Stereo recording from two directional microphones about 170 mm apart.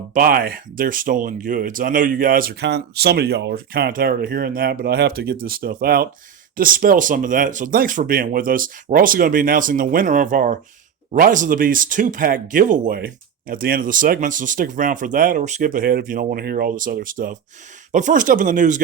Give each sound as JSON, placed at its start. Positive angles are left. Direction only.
{"t": 0.1, "sound": "speech", "side_deg": -60}